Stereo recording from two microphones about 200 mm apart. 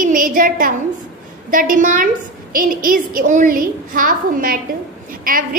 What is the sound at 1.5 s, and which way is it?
A woman's voice, 45° right (ahead or behind).